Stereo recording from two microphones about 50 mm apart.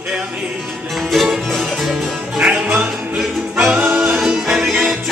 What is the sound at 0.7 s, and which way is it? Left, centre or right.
Music, centre.